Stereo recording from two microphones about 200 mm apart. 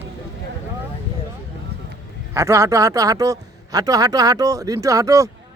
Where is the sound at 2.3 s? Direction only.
15° right (ahead or behind).